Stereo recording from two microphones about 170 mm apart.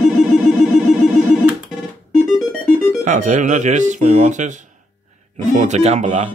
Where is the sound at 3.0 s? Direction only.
45° right (ahead or behind).